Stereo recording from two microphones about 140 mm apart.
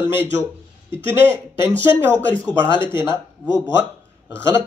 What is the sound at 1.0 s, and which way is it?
Speech, 15° right (ahead or behind).